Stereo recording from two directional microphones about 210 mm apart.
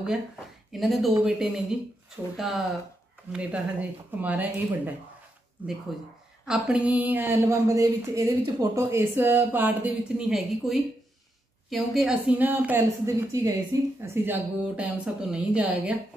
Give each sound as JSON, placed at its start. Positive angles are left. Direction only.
{"t": 0.7, "sound": "speech", "side_deg": 0}